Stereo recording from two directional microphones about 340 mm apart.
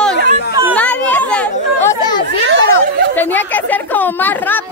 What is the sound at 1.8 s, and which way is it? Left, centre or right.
Chatter, centre.